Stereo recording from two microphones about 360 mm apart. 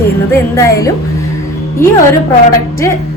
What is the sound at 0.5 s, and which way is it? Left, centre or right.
Speech, centre.